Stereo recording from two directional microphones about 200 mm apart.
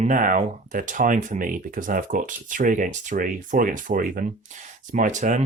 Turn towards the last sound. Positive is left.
turn(degrees=-40)  # may be behind; listen again after turning